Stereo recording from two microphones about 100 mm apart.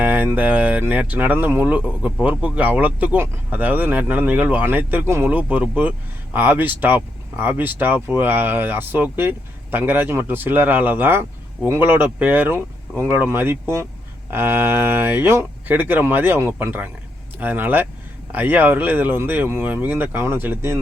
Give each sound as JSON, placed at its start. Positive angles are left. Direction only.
{"t": 0.0, "sound": "speech", "side_deg": -15}